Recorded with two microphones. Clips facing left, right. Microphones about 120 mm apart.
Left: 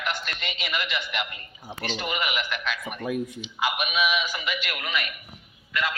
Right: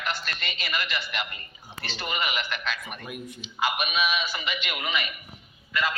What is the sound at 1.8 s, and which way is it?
Speech, 15° left (ahead or behind).